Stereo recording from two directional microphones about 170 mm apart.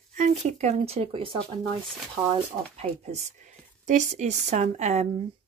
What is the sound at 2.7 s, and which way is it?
Speech, 40° right (ahead or behind).